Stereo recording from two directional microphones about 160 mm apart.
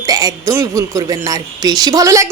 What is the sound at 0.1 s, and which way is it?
A woman's voice, 25° right (ahead or behind).